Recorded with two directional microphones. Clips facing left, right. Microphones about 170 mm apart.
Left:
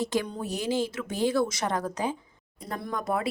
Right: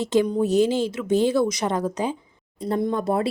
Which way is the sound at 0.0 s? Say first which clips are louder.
Right 9 dB; 20° right (ahead or behind).